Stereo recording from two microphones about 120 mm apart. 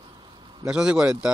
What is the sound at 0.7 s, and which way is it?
Speech, 10° right (ahead or behind).